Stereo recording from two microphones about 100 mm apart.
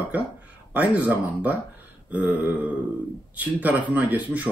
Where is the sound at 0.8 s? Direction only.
15° right (ahead or behind).